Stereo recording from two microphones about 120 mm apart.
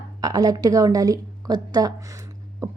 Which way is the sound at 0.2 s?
30° right (ahead or behind).